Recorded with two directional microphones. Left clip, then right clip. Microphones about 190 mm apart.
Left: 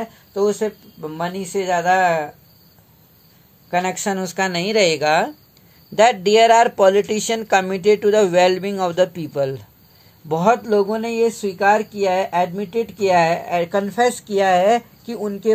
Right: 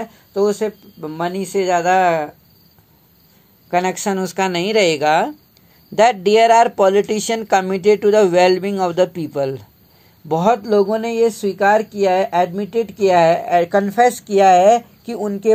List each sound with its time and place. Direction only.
0.0 s speech: 30° right (ahead or behind)
3.7 s speech: 30° right (ahead or behind)